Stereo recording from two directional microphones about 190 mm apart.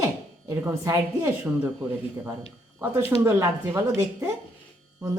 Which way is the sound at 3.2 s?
15° right (ahead or behind).